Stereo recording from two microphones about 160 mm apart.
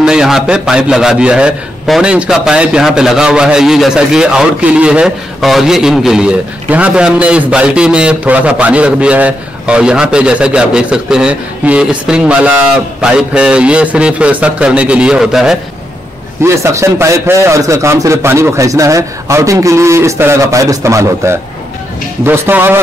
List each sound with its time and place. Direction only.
0.0 s a man's voice: 5° right (ahead or behind)
16.4 s a man's voice: 15° right (ahead or behind)